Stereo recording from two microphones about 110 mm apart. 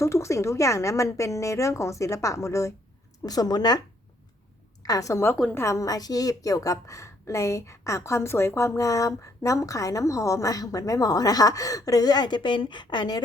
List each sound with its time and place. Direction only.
0.0 s a woman's voice: 25° left (ahead or behind)
4.8 s a woman's voice: 30° left (ahead or behind)